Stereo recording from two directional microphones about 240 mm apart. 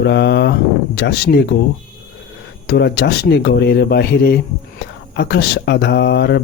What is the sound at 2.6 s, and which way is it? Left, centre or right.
Speech, left.